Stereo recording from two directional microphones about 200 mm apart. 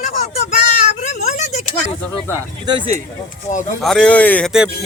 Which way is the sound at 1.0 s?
35° left (ahead or behind).